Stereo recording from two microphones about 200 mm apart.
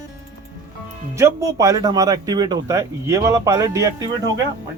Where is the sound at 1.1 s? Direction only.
15° right (ahead or behind).